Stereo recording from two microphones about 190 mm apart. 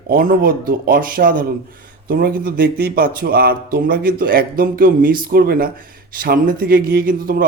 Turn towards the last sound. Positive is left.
turn(degrees=-50)  # may be behind; listen again after turning